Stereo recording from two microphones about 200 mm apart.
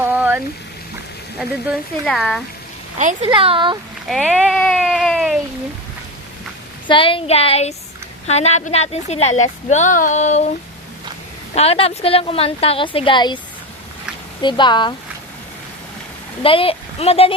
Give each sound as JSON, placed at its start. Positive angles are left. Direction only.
{"t": 0.0, "sound": "a sound", "side_deg": -10}
{"t": 1.4, "sound": "speech", "side_deg": -5}
{"t": 3.0, "sound": "speech", "side_deg": -40}
{"t": 3.2, "sound": "speech", "side_deg": -25}
{"t": 4.0, "sound": "a sound", "side_deg": 0}
{"t": 6.8, "sound": "a woman's voice", "side_deg": 25}
{"t": 11.5, "sound": "a woman's voice", "side_deg": 30}
{"t": 14.4, "sound": "a woman's voice", "side_deg": 25}
{"t": 16.4, "sound": "a woman's voice", "side_deg": 25}